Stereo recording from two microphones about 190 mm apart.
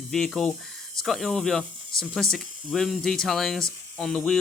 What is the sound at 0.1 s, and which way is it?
Speech, centre (ahead or behind).